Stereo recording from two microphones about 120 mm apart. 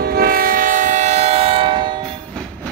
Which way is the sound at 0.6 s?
90° right.